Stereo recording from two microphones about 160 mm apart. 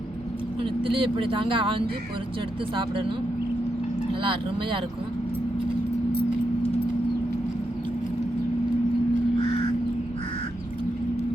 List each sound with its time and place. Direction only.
0.6 s speech: 35° right (ahead or behind)